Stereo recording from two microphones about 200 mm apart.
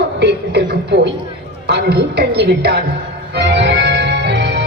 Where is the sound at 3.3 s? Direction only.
55° right (ahead or behind).